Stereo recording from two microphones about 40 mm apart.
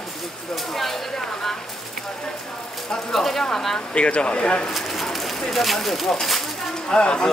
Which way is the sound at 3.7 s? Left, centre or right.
Left.